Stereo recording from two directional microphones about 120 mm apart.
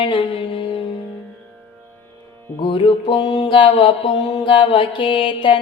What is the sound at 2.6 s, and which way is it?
Music, 45° left (ahead or behind).